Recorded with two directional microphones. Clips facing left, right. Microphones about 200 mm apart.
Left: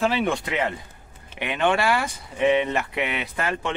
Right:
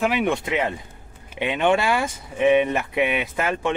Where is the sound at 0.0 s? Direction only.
15° right (ahead or behind).